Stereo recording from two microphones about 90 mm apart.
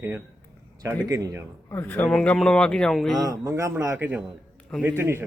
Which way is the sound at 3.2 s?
35° right (ahead or behind).